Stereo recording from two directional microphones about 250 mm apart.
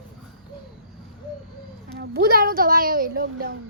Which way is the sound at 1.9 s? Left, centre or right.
Right.